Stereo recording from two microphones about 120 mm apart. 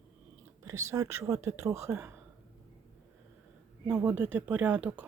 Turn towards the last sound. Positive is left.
turn(degrees=-10)  # may be behind; listen again after turning